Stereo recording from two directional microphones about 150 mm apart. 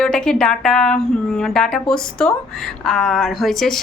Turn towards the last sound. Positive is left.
turn(degrees=0)  # may be behind; listen again after turning